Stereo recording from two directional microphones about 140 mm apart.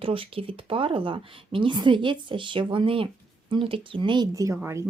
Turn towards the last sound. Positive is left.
turn(degrees=-20)  # may be behind; listen again after turning